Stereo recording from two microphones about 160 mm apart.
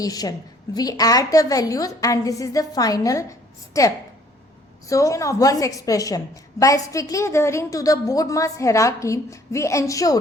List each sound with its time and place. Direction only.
0.0 s a woman's voice: 25° left (ahead or behind)